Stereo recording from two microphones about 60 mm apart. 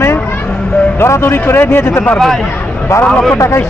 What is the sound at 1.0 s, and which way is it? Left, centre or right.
Speech, left.